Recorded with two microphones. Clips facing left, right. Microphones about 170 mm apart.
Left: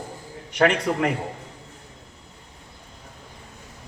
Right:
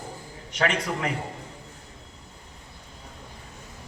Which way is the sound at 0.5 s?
60° left (ahead or behind).